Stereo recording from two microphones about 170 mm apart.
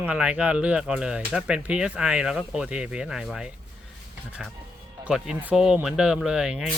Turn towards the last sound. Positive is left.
turn(degrees=-5)  # may be behind; listen again after turning